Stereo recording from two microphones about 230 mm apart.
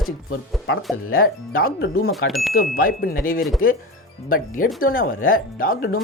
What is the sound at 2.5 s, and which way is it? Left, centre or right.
Speech, left.